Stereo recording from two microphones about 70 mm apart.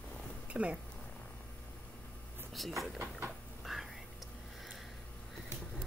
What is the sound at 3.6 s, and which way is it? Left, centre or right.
Whispering, centre.